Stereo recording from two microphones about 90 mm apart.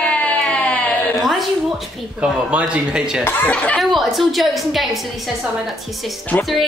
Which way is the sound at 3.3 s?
15° left (ahead or behind).